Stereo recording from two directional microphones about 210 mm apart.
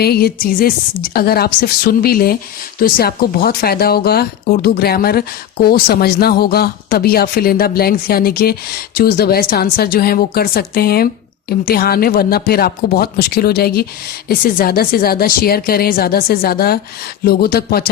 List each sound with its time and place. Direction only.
0.0 s a woman's voice: 50° left (ahead or behind)